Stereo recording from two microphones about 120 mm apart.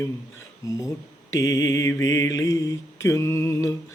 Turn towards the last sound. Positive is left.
turn(degrees=25)  # may be behind; listen again after turning